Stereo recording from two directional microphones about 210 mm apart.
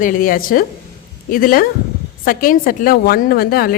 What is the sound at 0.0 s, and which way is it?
A woman's voice, 40° left (ahead or behind).